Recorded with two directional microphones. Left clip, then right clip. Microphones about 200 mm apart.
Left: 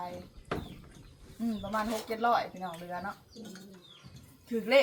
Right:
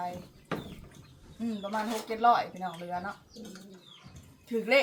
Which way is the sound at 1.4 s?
15° right (ahead or behind).